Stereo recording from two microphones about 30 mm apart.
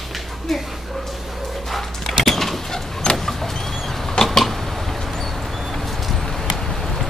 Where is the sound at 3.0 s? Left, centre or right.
Left.